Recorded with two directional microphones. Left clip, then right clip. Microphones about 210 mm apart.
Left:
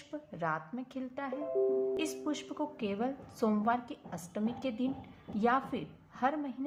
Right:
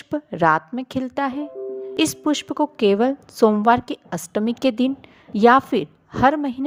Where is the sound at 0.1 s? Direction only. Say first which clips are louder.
Right 18 dB; 45° right (ahead or behind).